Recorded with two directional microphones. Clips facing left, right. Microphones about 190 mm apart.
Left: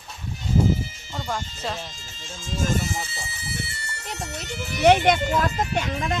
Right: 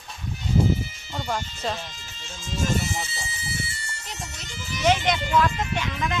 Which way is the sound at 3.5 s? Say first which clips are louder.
Left 1 dB; 60° left (ahead or behind).